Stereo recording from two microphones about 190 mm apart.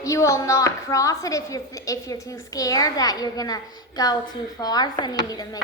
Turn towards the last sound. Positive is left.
turn(degrees=20)  # may be behind; listen again after turning